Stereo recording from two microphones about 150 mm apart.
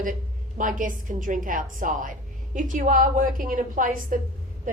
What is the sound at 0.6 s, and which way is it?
A woman's voice, 60° right (ahead or behind).